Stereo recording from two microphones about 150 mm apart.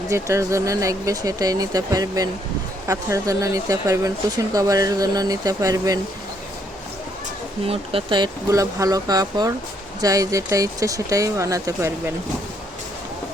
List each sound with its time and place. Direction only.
0.1 s speech: 20° right (ahead or behind)
7.7 s speech: 35° right (ahead or behind); by 12.1 s 20° right (ahead or behind)